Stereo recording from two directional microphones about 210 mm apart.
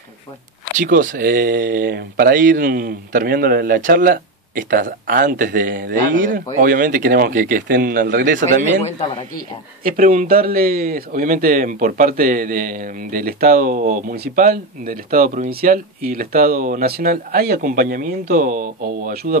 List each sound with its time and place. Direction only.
0.8 s speech: 40° right (ahead or behind)
9.8 s speech: 40° right (ahead or behind)